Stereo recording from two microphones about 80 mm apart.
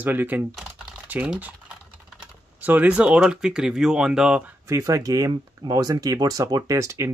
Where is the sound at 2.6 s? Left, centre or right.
Right.